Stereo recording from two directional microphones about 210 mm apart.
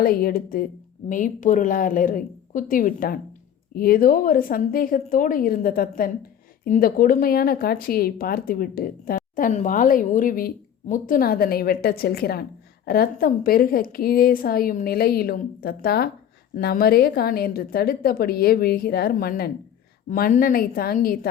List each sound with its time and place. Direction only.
0.0 s speech: 45° left (ahead or behind)